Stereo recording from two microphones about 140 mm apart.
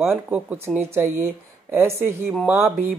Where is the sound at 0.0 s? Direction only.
15° right (ahead or behind).